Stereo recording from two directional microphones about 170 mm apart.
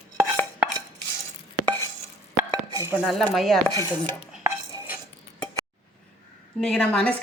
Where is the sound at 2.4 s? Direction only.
20° right (ahead or behind).